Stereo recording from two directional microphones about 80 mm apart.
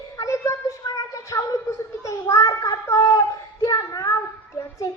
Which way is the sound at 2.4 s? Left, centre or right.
Left.